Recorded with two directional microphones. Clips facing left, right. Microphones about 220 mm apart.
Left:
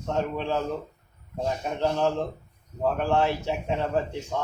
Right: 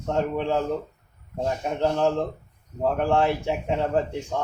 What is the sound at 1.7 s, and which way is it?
Speech, 20° right (ahead or behind).